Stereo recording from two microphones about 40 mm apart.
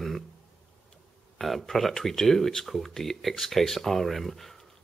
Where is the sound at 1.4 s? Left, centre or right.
Centre.